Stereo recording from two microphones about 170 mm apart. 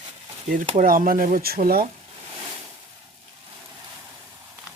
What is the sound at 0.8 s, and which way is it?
Speech, 55° right (ahead or behind).